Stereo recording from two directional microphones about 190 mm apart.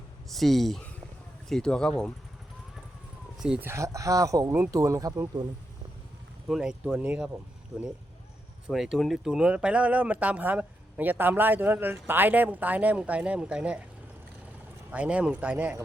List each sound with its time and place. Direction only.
0.3 s speech: centre (ahead or behind)
3.3 s speech: 5° right (ahead or behind)
6.5 s speech: 5° right (ahead or behind)
8.6 s speech: centre (ahead or behind)
14.8 s speech: 5° right (ahead or behind)